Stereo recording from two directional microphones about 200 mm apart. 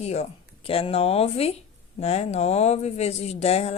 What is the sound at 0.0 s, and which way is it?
Speech, 30° left (ahead or behind).